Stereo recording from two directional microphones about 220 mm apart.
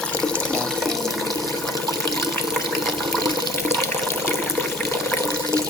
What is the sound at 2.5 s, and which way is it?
Water, centre (ahead or behind).